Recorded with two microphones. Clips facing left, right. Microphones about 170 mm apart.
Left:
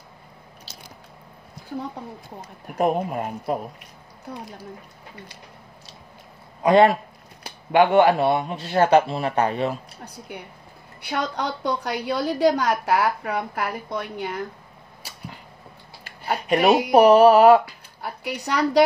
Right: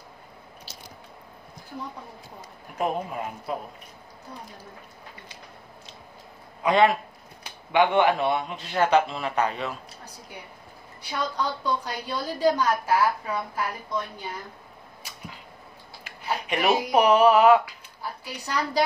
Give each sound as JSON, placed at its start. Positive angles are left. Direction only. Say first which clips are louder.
{"t": 2.8, "sound": "speech", "louder": "left 6 dB", "side_deg": 50}
{"t": 6.6, "sound": "speech", "louder": "left 5 dB", "side_deg": 45}
{"t": 11.0, "sound": "a woman's voice", "louder": "left 3 dB", "side_deg": 65}
{"t": 16.5, "sound": "speech", "louder": "left 6 dB", "side_deg": 65}
{"t": 16.9, "sound": "speech", "louder": "left 5 dB", "side_deg": 35}
{"t": 18.0, "sound": "a woman's voice", "louder": "left 6 dB", "side_deg": 65}